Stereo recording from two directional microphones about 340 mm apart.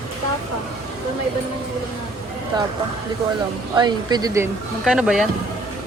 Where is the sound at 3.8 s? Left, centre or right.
Centre.